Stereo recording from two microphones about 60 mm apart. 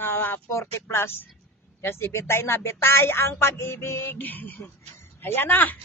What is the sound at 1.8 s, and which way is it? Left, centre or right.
Speech, left.